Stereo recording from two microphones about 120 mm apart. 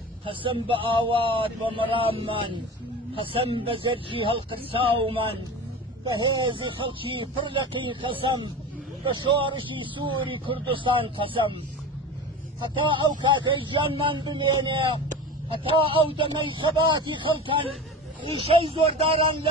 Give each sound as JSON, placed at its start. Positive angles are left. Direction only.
{"t": 0.2, "sound": "speech", "side_deg": -45}
{"t": 13.4, "sound": "speech", "side_deg": -45}